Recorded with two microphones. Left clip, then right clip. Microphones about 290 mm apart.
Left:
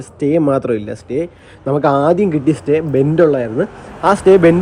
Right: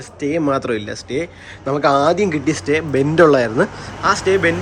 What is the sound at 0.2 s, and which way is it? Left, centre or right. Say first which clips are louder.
A man's voice: left 4 dB; centre.